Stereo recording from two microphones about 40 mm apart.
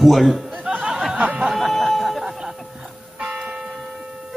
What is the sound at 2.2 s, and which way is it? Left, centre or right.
Music, centre.